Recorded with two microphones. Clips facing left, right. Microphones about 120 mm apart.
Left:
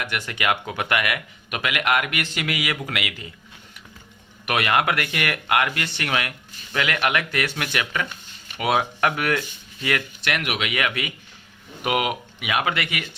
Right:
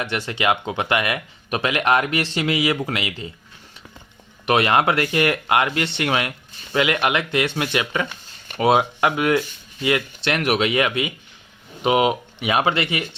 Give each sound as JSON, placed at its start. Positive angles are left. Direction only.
{"t": 0.0, "sound": "speech", "side_deg": -30}
{"t": 4.4, "sound": "speech", "side_deg": -30}